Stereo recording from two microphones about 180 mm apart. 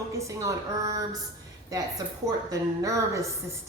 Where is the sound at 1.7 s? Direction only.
20° right (ahead or behind).